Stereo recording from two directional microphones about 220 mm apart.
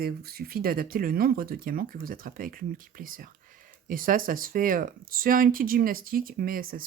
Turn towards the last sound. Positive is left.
turn(degrees=-40)  # may be behind; listen again after turning